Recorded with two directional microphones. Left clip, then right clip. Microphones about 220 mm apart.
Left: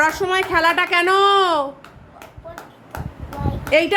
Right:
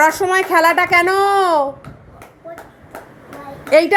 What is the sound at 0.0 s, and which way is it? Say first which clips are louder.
A woman's voice: right 4 dB; 15° right (ahead or behind).